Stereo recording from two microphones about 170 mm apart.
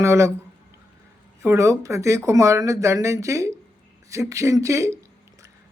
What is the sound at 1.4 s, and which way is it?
Speech, 15° right (ahead or behind).